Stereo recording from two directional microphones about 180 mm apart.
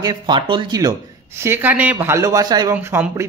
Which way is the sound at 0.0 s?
25° right (ahead or behind).